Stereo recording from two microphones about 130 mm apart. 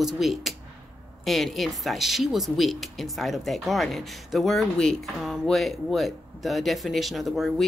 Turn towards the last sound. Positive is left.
turn(degrees=0)  # may be behind; listen again after turning